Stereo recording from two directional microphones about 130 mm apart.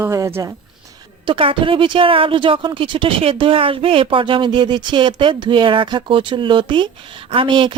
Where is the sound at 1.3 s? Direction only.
40° right (ahead or behind).